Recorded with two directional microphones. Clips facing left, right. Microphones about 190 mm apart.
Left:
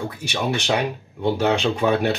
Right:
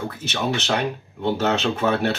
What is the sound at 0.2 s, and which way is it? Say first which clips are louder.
Speech: even; 10° left (ahead or behind).